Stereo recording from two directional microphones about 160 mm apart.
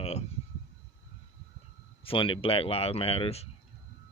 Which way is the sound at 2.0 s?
35° left (ahead or behind).